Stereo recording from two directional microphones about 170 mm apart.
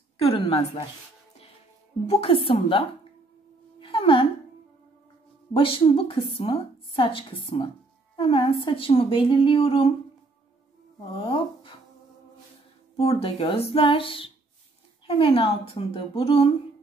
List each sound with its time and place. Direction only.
0.2 s a woman's voice: 35° left (ahead or behind)
2.0 s a woman's voice: 35° left (ahead or behind)
3.8 s a sound: 30° left (ahead or behind)
5.5 s a woman's voice: 30° left (ahead or behind)
11.2 s speech: 30° left (ahead or behind)
13.0 s a woman's voice: 35° left (ahead or behind)